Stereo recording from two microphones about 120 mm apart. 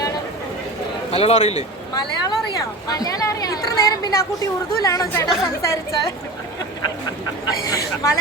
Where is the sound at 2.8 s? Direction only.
30° left (ahead or behind).